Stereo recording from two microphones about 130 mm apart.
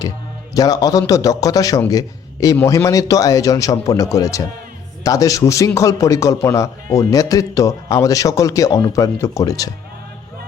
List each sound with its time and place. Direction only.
0.5 s a man's voice: 30° left (ahead or behind)